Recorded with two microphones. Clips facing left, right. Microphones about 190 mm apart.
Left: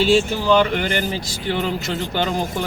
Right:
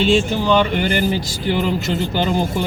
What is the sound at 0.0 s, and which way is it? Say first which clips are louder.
Speech: right 1 dB; 5° left (ahead or behind).